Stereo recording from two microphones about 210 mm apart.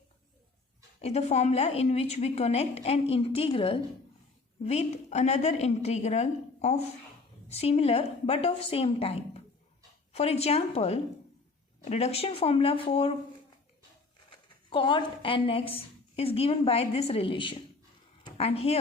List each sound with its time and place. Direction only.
1.0 s a woman's voice: 30° left (ahead or behind)
14.7 s a woman's voice: 25° left (ahead or behind)